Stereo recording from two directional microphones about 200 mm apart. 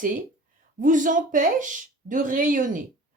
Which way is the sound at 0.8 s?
40° right (ahead or behind).